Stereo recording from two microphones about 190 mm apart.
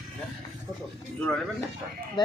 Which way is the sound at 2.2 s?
25° left (ahead or behind).